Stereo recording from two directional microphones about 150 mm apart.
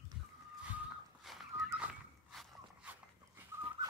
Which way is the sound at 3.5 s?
15° right (ahead or behind).